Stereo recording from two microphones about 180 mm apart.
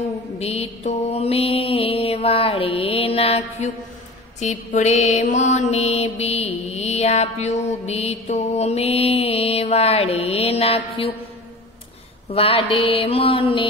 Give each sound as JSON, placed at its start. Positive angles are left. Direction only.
{"t": 0.4, "sound": "mantra", "side_deg": 35}
{"t": 12.3, "sound": "mantra", "side_deg": 35}